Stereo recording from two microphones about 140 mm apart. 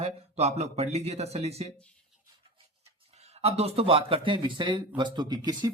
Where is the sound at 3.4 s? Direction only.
45° right (ahead or behind).